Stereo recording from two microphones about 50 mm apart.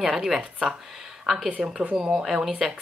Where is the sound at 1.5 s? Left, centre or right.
Right.